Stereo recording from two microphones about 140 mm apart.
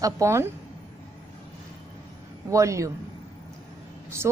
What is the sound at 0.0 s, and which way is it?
Speech, 20° right (ahead or behind).